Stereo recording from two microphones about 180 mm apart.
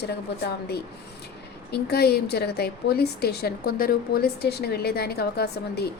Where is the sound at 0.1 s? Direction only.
65° left (ahead or behind).